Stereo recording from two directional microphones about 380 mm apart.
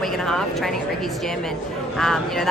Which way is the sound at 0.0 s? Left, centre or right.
Centre.